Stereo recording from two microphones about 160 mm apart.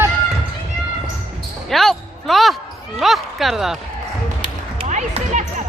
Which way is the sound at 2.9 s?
Centre (ahead or behind).